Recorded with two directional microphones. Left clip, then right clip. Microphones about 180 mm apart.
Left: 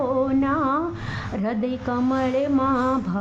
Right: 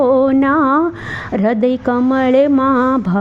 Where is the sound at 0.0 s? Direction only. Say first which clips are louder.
Right 10 dB; 40° right (ahead or behind).